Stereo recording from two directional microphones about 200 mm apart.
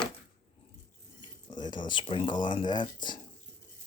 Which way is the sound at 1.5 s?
20° left (ahead or behind).